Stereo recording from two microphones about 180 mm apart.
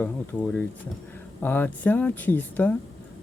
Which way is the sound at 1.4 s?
10° left (ahead or behind).